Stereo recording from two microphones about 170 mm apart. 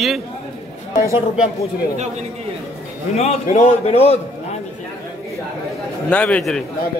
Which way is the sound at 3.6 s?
35° left (ahead or behind).